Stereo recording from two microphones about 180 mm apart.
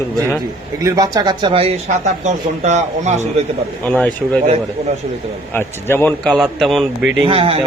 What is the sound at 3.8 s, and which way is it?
Speech, 5° left (ahead or behind).